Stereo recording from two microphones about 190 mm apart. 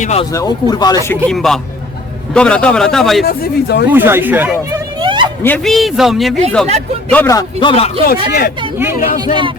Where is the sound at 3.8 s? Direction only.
10° right (ahead or behind).